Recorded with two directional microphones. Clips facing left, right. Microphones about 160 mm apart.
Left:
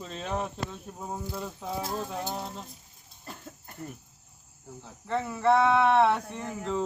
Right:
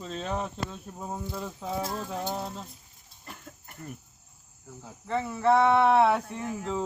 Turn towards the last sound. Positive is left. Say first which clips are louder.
# even
turn(degrees=-5)  # may be behind; listen again after turning